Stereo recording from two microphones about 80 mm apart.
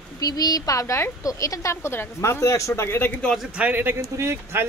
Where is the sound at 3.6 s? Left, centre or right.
Right.